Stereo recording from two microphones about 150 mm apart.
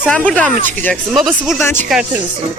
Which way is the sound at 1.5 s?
15° left (ahead or behind).